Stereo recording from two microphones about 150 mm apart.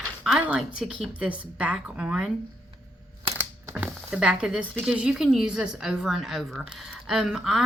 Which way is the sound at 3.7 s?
5° right (ahead or behind).